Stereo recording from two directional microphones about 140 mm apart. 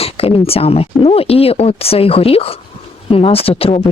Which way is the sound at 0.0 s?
45° left (ahead or behind).